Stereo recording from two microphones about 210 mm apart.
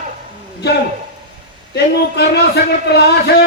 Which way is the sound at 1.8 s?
50° left (ahead or behind).